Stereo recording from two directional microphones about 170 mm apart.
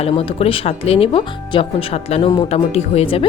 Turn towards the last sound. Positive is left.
turn(degrees=35)  # may be behind; listen again after turning